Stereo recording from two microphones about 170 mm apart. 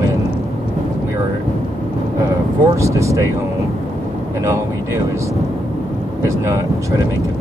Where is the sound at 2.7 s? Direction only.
15° right (ahead or behind).